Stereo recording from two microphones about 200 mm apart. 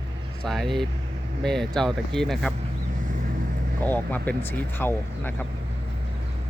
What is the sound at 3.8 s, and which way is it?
Speech, 10° left (ahead or behind).